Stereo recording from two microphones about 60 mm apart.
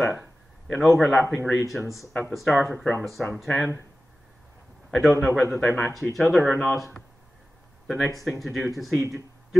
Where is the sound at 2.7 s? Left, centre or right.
Centre.